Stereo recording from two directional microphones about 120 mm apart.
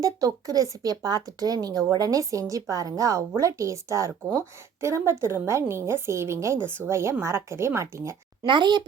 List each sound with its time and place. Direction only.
0.0 s speech: 30° right (ahead or behind)
8.4 s speech: 40° right (ahead or behind)